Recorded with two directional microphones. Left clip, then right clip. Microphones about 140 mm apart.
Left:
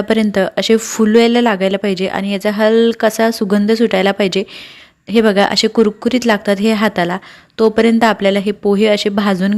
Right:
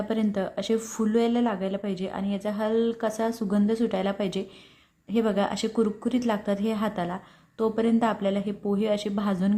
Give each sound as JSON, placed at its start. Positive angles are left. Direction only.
{"t": 0.1, "sound": "speech", "side_deg": 30}